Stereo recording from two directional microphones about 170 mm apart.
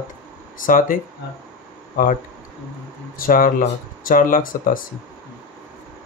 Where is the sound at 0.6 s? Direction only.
50° left (ahead or behind).